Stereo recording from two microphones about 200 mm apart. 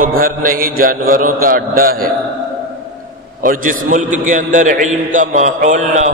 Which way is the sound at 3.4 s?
40° right (ahead or behind).